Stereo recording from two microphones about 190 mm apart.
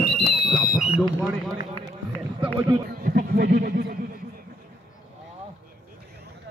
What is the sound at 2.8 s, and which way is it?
Speech, 55° right (ahead or behind).